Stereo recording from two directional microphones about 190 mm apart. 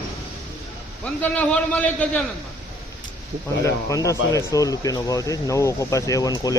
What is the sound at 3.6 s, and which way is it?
Speech, 15° left (ahead or behind).